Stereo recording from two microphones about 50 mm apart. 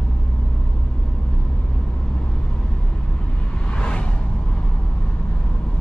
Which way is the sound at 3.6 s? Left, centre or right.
Left.